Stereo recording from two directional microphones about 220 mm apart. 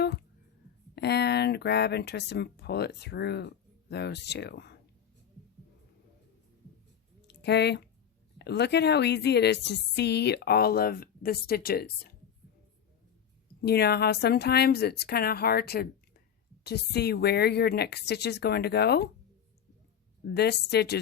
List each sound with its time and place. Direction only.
0.9 s speech: 50° left (ahead or behind)
7.3 s a sound: 50° left (ahead or behind)
8.4 s a woman's voice: 50° left (ahead or behind)
13.6 s a woman's voice: 45° left (ahead or behind)
20.3 s a woman's voice: 50° left (ahead or behind)